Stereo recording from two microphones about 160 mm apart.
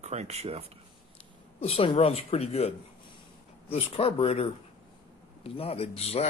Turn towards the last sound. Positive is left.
turn(degrees=40)  # may be behind; listen again after turning